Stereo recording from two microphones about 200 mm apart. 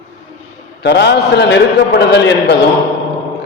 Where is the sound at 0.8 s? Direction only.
60° left (ahead or behind).